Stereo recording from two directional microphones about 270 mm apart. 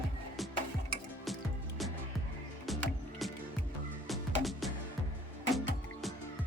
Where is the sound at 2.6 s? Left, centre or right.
Centre.